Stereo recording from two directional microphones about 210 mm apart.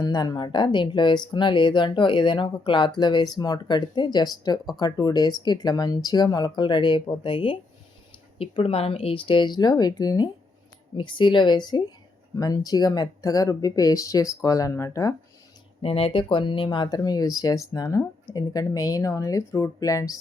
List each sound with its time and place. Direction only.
0.0 s speech: 20° left (ahead or behind)
15.8 s speech: 25° left (ahead or behind)